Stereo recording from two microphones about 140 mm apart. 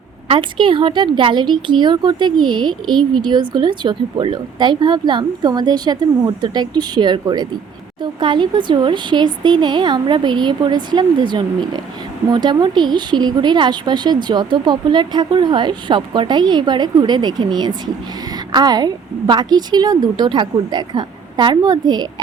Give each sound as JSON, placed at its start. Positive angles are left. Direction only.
{"t": 0.3, "sound": "a woman's voice", "side_deg": -35}